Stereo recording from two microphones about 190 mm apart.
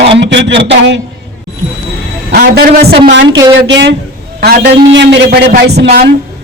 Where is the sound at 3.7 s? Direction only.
65° right (ahead or behind).